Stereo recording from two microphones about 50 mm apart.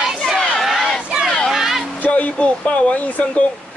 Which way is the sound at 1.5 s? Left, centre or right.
Centre.